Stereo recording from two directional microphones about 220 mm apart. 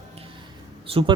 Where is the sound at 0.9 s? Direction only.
25° right (ahead or behind).